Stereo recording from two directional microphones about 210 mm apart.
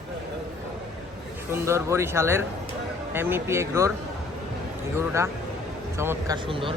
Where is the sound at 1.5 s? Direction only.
10° right (ahead or behind).